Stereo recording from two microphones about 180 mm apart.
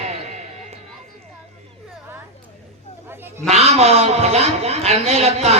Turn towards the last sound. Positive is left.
turn(degrees=-35)  # may be behind; listen again after turning